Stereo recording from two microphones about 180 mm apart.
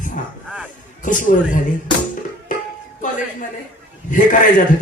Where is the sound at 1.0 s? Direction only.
45° left (ahead or behind).